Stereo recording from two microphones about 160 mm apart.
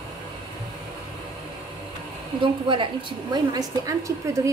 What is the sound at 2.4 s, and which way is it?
A woman's voice, 30° right (ahead or behind).